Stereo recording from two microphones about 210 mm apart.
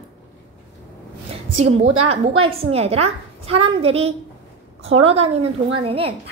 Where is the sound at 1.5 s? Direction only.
30° right (ahead or behind).